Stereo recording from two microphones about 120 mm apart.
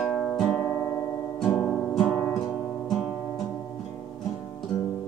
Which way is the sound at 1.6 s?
5° left (ahead or behind).